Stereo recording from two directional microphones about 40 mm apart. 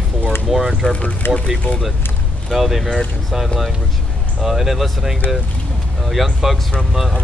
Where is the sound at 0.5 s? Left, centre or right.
Centre.